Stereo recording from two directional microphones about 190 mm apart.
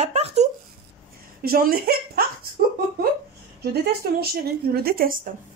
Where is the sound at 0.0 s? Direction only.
35° right (ahead or behind).